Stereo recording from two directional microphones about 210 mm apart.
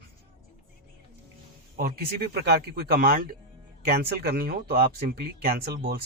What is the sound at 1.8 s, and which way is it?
Speech, 45° right (ahead or behind).